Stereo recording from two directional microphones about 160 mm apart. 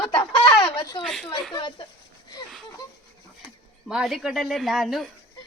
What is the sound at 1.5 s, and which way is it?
Speech, 30° left (ahead or behind).